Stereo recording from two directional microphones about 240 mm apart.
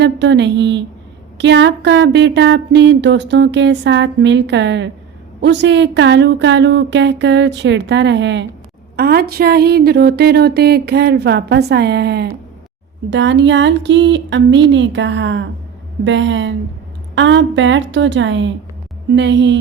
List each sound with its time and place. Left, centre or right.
0.0 s speech: right
9.0 s a sound: right
13.1 s speech: right